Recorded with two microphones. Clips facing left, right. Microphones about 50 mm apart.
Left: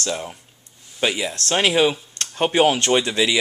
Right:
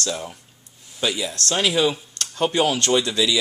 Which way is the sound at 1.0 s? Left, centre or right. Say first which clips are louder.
Left 2 dB; left.